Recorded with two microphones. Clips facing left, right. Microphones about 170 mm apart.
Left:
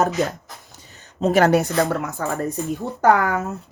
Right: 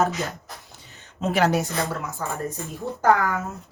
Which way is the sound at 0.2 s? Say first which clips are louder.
Left 8 dB; 40° left (ahead or behind).